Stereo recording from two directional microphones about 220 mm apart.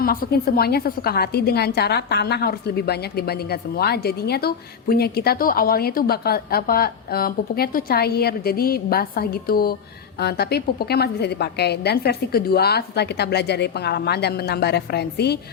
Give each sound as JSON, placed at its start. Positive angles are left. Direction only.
{"t": 0.0, "sound": "a woman's voice", "side_deg": 40}